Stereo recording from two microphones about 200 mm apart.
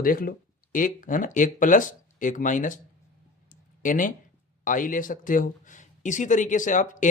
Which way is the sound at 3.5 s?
40° left (ahead or behind).